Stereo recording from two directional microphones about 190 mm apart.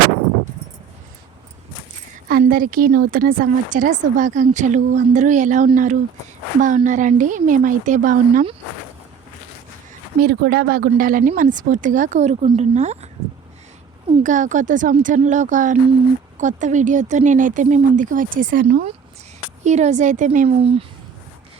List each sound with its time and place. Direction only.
2.4 s speech: 50° right (ahead or behind)
10.2 s speech: 55° right (ahead or behind); by 13.1 s 35° right (ahead or behind)
14.1 s speech: 40° right (ahead or behind)
18.6 s speech: 55° right (ahead or behind)
19.6 s speech: 35° right (ahead or behind)
20.6 s speech: 30° right (ahead or behind)